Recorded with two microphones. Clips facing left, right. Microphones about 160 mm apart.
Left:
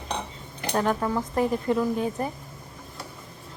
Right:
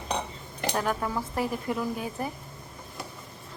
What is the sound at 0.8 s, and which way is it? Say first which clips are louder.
Speech: left 5 dB; 20° left (ahead or behind).